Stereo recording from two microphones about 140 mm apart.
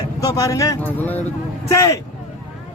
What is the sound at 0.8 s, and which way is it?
Speech, 10° left (ahead or behind).